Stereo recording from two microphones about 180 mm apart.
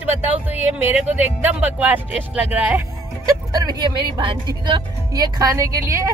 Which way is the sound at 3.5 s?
20° right (ahead or behind).